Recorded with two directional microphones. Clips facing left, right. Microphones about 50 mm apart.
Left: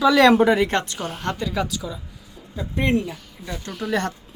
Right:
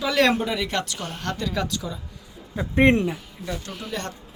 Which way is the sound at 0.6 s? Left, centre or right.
Left.